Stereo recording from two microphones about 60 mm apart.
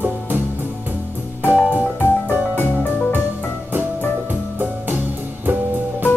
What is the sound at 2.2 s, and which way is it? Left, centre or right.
Music, left.